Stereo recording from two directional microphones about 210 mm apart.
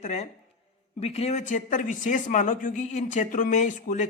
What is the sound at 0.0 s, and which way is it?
A man's voice, 35° left (ahead or behind).